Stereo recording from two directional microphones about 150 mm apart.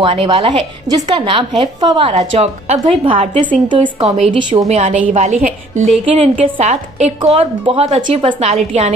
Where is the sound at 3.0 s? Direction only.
35° right (ahead or behind).